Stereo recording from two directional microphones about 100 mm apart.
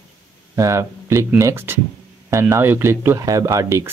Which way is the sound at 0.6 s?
30° right (ahead or behind).